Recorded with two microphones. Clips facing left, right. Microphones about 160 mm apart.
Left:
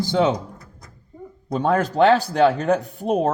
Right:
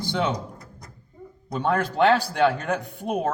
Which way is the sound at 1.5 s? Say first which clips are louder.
Left 4 dB; 40° left (ahead or behind).